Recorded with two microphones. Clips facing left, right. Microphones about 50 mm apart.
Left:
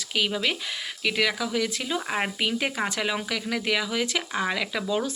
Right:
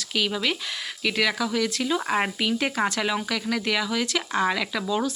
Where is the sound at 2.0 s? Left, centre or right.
Centre.